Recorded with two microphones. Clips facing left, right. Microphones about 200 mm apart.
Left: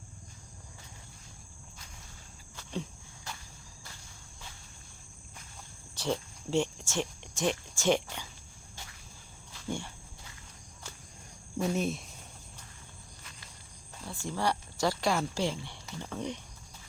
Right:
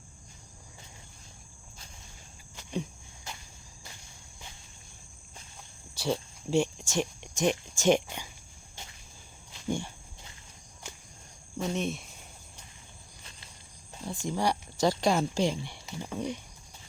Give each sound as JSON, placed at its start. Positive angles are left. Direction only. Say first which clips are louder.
{"t": 3.8, "sound": "insect", "louder": "right 2 dB", "side_deg": -20}
{"t": 5.9, "sound": "speech", "louder": "right 2 dB", "side_deg": -10}
{"t": 8.7, "sound": "a sound", "louder": "right 1 dB", "side_deg": -20}
{"t": 11.6, "sound": "speech", "louder": "left 1 dB", "side_deg": 5}
{"t": 14.0, "sound": "speech", "louder": "right 3 dB", "side_deg": -20}